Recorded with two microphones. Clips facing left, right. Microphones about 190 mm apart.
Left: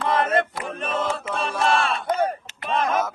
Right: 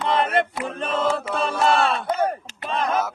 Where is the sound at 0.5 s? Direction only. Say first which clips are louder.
Right 2 dB; 25° right (ahead or behind).